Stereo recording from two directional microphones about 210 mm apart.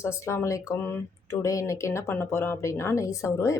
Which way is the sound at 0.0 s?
10° left (ahead or behind).